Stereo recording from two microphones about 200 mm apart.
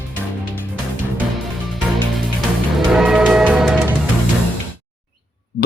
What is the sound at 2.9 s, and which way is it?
Music, 5° right (ahead or behind).